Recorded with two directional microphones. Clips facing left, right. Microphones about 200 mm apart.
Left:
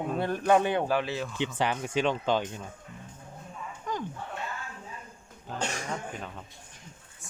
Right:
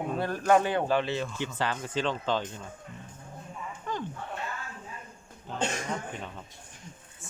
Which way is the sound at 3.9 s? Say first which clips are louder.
Left 1 dB; 15° left (ahead or behind).